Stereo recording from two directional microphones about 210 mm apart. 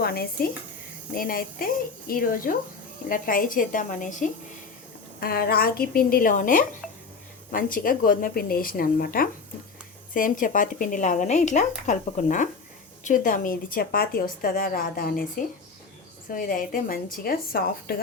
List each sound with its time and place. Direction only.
0.0 s a woman's voice: 45° left (ahead or behind)
16.3 s speech: 40° left (ahead or behind)